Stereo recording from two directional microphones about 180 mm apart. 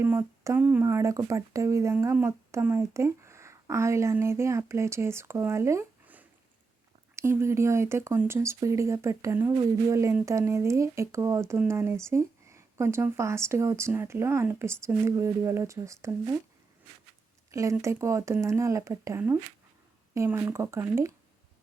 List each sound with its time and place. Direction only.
0.0 s speech: 15° right (ahead or behind)
17.5 s speech: 15° right (ahead or behind)